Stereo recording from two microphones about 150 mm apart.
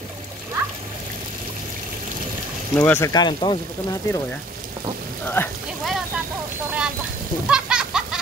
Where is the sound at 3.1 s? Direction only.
30° left (ahead or behind).